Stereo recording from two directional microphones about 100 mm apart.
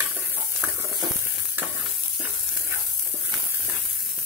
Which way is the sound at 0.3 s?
25° right (ahead or behind).